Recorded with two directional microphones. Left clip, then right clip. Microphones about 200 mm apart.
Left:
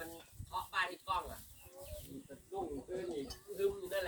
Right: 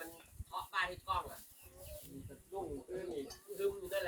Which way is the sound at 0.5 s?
55° left (ahead or behind).